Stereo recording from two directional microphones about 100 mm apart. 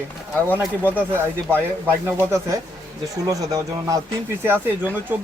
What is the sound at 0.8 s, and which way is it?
Speech, 20° right (ahead or behind).